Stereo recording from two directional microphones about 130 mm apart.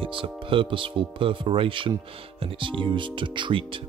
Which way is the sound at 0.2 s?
40° right (ahead or behind).